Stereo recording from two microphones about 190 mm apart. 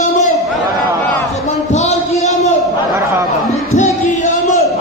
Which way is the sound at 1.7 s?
35° left (ahead or behind).